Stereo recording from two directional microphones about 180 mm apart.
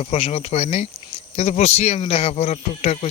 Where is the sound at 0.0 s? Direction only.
35° left (ahead or behind).